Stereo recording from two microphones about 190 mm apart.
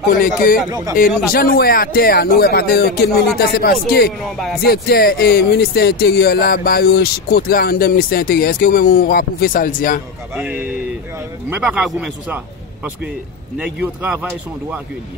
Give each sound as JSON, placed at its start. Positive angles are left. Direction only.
{"t": 0.2, "sound": "speech", "side_deg": 50}
{"t": 10.3, "sound": "a man's voice", "side_deg": -10}
{"t": 13.6, "sound": "a man's voice", "side_deg": -5}